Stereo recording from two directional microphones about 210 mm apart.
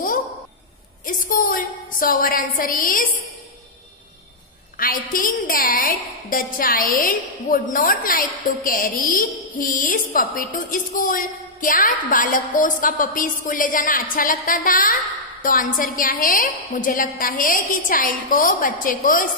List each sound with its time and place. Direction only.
1.0 s a woman's voice: 40° left (ahead or behind)
4.7 s a woman's voice: 40° left (ahead or behind)